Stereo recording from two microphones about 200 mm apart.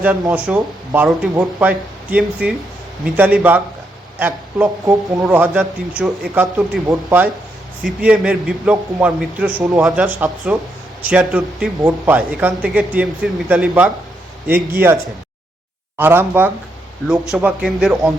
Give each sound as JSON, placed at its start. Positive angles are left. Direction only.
{"t": 0.0, "sound": "speech", "side_deg": -5}
{"t": 16.0, "sound": "speech", "side_deg": -10}